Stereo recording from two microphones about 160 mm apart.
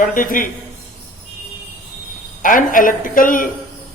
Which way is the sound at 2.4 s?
55° left (ahead or behind).